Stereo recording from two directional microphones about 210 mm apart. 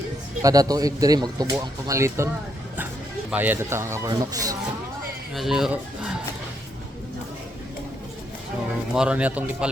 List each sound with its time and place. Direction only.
0.4 s speech: 15° right (ahead or behind)
3.3 s speech: 10° right (ahead or behind)
5.3 s speech: centre (ahead or behind)
9.0 s speech: 5° right (ahead or behind)